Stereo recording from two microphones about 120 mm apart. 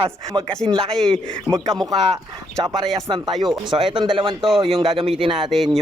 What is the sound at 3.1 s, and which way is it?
Speech, 35° right (ahead or behind).